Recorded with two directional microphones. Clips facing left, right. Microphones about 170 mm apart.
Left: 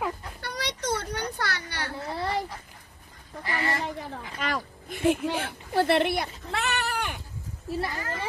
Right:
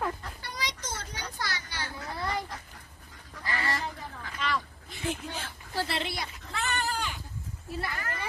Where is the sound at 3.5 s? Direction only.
20° left (ahead or behind).